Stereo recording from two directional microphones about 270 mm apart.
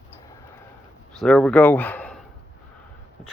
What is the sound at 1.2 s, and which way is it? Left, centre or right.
Speech, centre.